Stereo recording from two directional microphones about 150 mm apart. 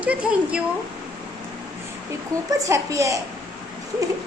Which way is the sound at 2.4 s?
20° right (ahead or behind).